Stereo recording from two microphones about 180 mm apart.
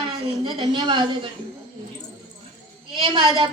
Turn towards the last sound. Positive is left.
turn(degrees=-25)  # may be behind; listen again after turning